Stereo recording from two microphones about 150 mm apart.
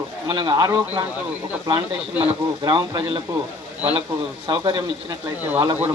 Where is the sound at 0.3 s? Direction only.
25° right (ahead or behind).